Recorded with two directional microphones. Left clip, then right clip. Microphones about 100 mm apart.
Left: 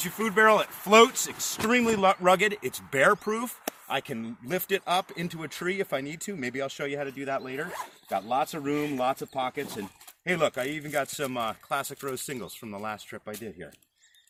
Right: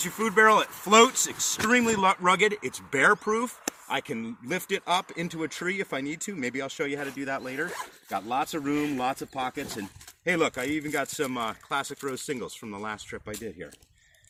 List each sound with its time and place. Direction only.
0.0 s speech: 50° left (ahead or behind); by 2.0 s 30° left (ahead or behind)
2.2 s speech: 75° left (ahead or behind); by 3.5 s 60° left (ahead or behind)
3.8 s speech: 75° left (ahead or behind); by 9.8 s 20° left (ahead or behind)
10.2 s speech: 45° left (ahead or behind)